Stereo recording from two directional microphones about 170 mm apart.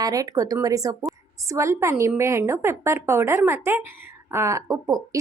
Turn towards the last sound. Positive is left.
turn(degrees=-20)  # may be behind; listen again after turning